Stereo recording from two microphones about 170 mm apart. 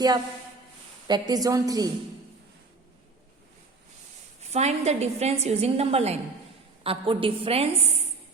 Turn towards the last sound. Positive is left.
turn(degrees=-35)  # may be behind; listen again after turning